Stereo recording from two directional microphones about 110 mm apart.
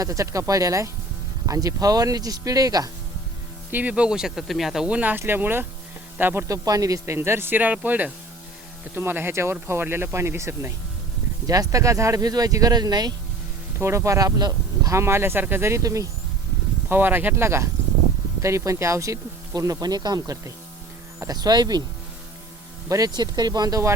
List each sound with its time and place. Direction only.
0.0 s speech: 30° right (ahead or behind)
3.7 s speech: 15° right (ahead or behind)
6.5 s speech: 30° right (ahead or behind)
13.7 s speech: 25° right (ahead or behind)
14.9 s speech: 25° right (ahead or behind)
16.9 s speech: 15° right (ahead or behind); by 21.8 s 40° right (ahead or behind)
22.9 s speech: 35° right (ahead or behind)